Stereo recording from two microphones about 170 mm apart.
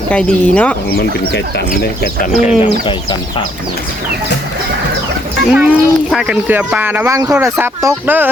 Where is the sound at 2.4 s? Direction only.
40° left (ahead or behind).